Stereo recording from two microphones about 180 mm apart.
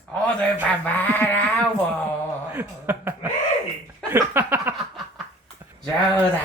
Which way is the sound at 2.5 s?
10° right (ahead or behind).